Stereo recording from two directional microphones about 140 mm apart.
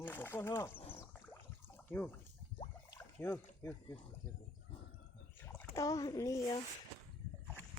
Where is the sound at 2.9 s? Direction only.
15° left (ahead or behind).